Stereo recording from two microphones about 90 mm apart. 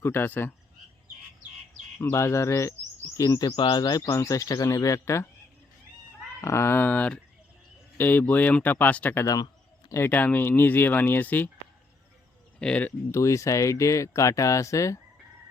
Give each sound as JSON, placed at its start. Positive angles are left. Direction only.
{"t": 0.0, "sound": "speech", "side_deg": 25}
{"t": 2.0, "sound": "speech", "side_deg": 30}
{"t": 3.5, "sound": "speech", "side_deg": 60}
{"t": 4.1, "sound": "speech", "side_deg": 35}
{"t": 6.4, "sound": "speech", "side_deg": 30}
{"t": 9.2, "sound": "speech", "side_deg": 45}
{"t": 10.1, "sound": "speech", "side_deg": 20}
{"t": 12.5, "sound": "speech", "side_deg": 10}
{"t": 13.1, "sound": "speech", "side_deg": 35}